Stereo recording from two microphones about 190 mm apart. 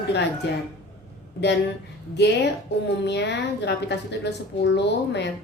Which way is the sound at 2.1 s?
65° left (ahead or behind).